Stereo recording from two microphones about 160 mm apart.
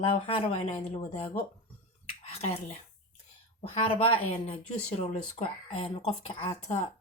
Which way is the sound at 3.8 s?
35° left (ahead or behind).